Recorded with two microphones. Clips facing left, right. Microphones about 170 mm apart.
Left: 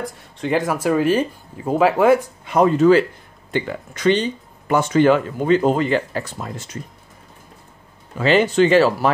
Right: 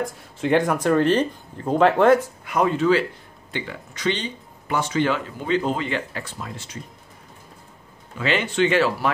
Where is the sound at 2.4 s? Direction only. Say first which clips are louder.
Left 6 dB; 35° left (ahead or behind).